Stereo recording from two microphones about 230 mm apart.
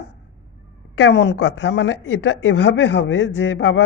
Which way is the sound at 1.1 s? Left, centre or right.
Left.